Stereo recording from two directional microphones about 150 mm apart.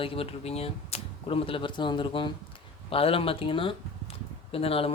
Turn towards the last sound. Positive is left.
turn(degrees=40)  # may be behind; listen again after turning